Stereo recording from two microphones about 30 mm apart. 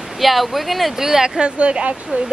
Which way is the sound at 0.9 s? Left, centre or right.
Centre.